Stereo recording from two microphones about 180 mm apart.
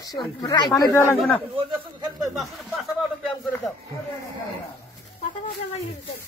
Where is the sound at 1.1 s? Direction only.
Centre (ahead or behind).